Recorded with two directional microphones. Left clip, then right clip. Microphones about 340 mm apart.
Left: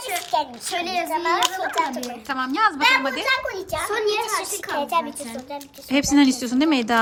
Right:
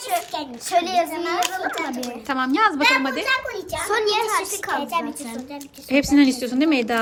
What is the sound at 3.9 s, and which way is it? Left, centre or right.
Speech, right.